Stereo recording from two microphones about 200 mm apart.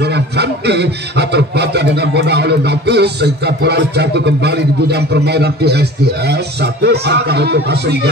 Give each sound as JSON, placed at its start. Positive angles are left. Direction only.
{"t": 0.0, "sound": "music", "side_deg": -55}